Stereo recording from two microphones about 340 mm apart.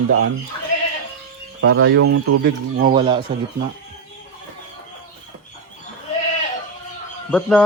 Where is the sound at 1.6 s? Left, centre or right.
Right.